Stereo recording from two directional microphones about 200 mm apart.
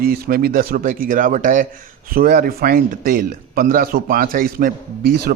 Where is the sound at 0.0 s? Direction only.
50° right (ahead or behind).